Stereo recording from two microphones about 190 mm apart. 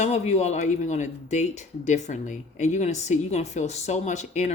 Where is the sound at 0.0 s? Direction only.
35° left (ahead or behind).